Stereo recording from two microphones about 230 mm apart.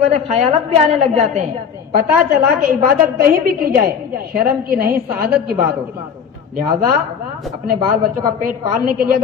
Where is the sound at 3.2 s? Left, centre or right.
Right.